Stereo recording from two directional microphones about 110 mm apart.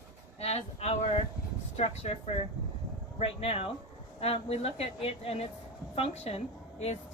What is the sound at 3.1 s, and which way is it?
A woman's voice, 65° left (ahead or behind).